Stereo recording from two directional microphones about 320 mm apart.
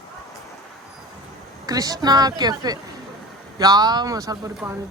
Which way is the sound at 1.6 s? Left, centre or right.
Centre.